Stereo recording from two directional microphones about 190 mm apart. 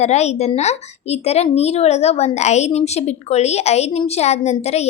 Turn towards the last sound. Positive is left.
turn(degrees=35)  # may be behind; listen again after turning